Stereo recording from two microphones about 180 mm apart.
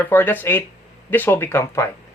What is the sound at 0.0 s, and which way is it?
Speech, 10° left (ahead or behind).